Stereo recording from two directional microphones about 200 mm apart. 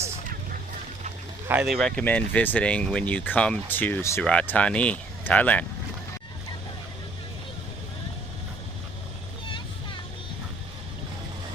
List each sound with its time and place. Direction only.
1.5 s speech: 5° right (ahead or behind)